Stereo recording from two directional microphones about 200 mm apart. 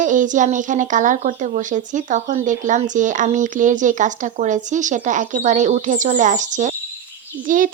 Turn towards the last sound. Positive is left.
turn(degrees=-40)  # may be behind; listen again after turning